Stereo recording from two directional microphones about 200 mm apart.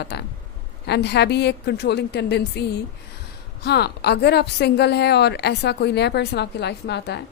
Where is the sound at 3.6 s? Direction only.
55° left (ahead or behind).